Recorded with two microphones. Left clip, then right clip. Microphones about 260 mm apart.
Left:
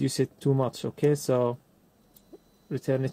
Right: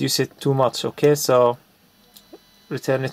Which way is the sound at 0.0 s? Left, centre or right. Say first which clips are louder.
Right 6 dB; centre.